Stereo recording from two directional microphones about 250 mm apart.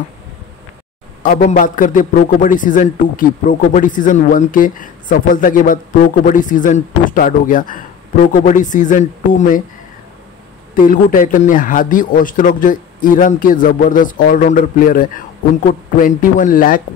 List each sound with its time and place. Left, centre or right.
1.2 s a man's voice: left
10.8 s a man's voice: left